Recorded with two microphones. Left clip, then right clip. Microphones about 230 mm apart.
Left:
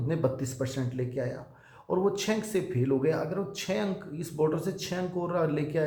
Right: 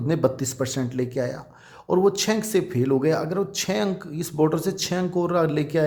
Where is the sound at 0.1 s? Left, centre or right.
Right.